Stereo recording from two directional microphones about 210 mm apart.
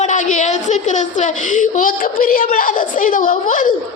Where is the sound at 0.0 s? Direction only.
35° left (ahead or behind).